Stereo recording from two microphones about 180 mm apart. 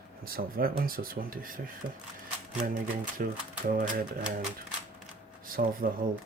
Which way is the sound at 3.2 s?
50° right (ahead or behind).